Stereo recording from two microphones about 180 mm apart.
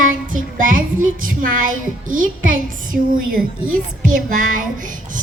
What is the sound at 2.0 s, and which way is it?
A child's voice, 50° right (ahead or behind).